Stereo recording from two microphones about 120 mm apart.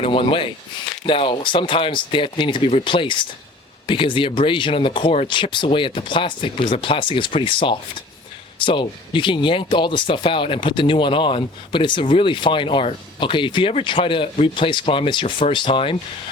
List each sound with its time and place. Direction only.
0.0 s speech: 50° left (ahead or behind)